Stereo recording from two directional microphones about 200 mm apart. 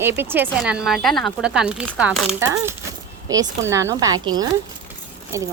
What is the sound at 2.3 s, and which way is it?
Speech, 10° right (ahead or behind).